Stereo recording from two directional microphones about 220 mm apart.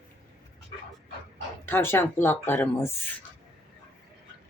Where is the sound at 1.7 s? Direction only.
10° left (ahead or behind).